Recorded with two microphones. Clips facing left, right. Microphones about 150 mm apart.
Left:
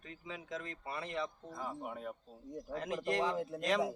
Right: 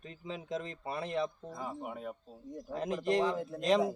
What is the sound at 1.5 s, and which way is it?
Speech, 10° right (ahead or behind).